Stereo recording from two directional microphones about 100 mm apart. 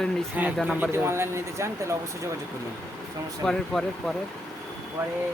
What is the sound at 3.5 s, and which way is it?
Speech, 5° left (ahead or behind).